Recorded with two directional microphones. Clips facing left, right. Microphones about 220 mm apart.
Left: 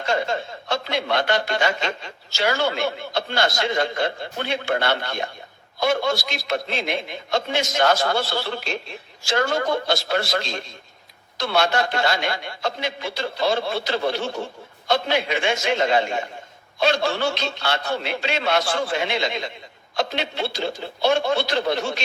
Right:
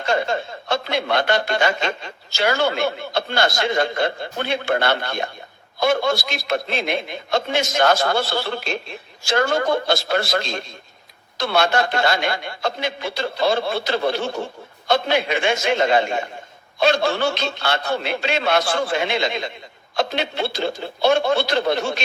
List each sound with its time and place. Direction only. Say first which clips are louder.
0.1 s chuckle: right 2 dB; 55° right (ahead or behind)
0.7 s a man's voice: right 2 dB; 55° right (ahead or behind)